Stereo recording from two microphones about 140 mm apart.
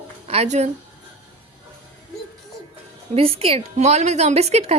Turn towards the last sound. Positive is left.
turn(degrees=-50)  # may be behind; listen again after turning